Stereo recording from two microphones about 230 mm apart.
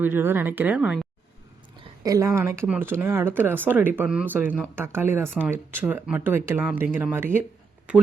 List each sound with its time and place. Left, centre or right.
0.0 s speech: centre
2.0 s speech: centre